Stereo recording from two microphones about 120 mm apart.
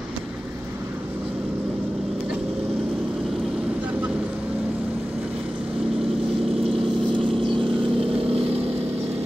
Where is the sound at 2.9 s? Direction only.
Centre (ahead or behind).